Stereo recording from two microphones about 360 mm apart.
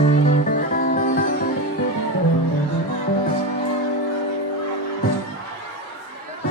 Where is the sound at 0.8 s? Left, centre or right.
Left.